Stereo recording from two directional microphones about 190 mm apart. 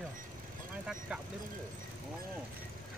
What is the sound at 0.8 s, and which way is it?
Speech, 5° right (ahead or behind).